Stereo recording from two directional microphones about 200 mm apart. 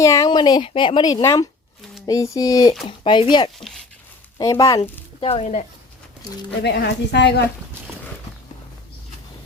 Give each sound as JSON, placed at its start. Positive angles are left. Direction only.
{"t": 0.0, "sound": "a woman's voice", "side_deg": 15}
{"t": 6.6, "sound": "speech", "side_deg": 55}